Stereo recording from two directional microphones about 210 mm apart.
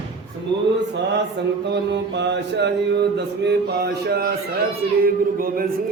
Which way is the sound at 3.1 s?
50° right (ahead or behind).